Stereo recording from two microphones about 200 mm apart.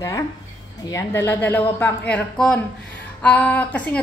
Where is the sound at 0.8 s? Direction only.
15° left (ahead or behind).